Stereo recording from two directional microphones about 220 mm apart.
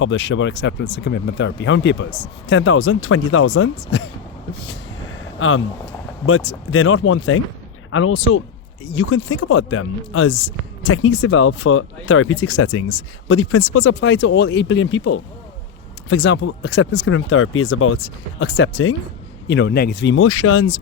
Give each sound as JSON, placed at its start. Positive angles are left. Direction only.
{"t": 0.0, "sound": "a man's voice", "side_deg": 60}
{"t": 2.0, "sound": "speech", "side_deg": 30}
{"t": 2.5, "sound": "a man's voice", "side_deg": 60}
{"t": 5.4, "sound": "a man's voice", "side_deg": 65}
{"t": 19.5, "sound": "a man's voice", "side_deg": 50}